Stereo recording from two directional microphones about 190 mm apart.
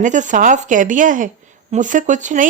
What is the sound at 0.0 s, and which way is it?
Speech, 40° right (ahead or behind).